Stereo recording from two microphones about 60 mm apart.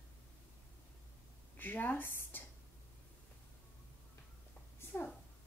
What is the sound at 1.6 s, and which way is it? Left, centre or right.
Speech, left.